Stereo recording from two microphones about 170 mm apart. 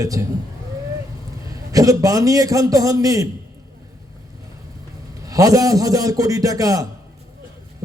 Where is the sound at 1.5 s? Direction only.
20° right (ahead or behind).